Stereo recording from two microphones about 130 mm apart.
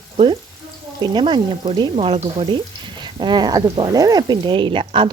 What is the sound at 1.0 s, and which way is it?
A woman's voice, 35° right (ahead or behind).